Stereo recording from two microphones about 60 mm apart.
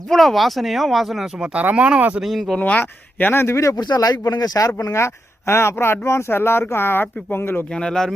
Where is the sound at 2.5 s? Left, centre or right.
Left.